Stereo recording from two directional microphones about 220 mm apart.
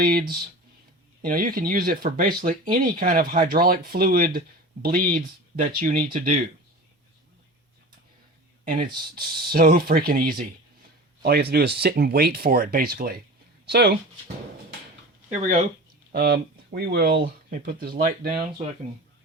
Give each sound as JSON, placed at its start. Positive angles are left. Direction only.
{"t": 0.0, "sound": "speech", "side_deg": -45}
{"t": 8.6, "sound": "speech", "side_deg": -40}
{"t": 15.3, "sound": "speech", "side_deg": -30}
{"t": 16.1, "sound": "speech", "side_deg": -45}